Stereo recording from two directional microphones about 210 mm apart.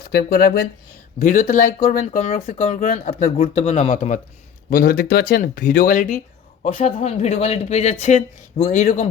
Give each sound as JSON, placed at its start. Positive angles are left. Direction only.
{"t": 0.1, "sound": "speech", "side_deg": 45}
{"t": 1.2, "sound": "speech", "side_deg": 40}
{"t": 4.7, "sound": "speech", "side_deg": 45}